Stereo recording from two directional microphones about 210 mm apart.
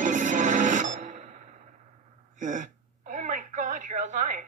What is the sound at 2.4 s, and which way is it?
Speech, 40° right (ahead or behind).